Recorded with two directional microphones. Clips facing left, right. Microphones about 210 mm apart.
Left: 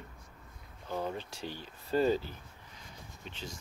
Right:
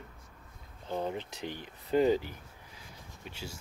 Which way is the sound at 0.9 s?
20° right (ahead or behind).